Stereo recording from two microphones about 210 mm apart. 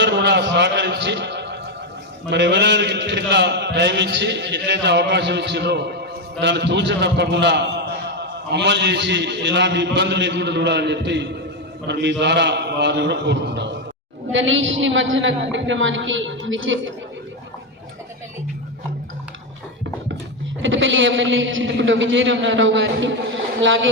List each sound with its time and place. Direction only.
0.0 s music: 55° right (ahead or behind)
2.3 s a man's voice: 55° right (ahead or behind)
20.6 s a man's voice: 65° right (ahead or behind)